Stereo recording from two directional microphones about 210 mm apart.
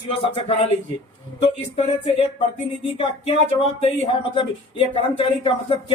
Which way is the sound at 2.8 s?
30° left (ahead or behind).